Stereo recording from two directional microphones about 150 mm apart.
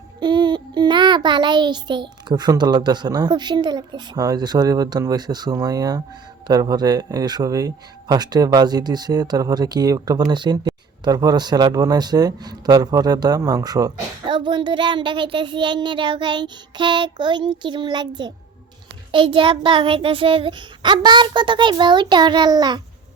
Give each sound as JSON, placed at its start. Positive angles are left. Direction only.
{"t": 0.2, "sound": "speech", "side_deg": -30}
{"t": 19.1, "sound": "child singing", "side_deg": -35}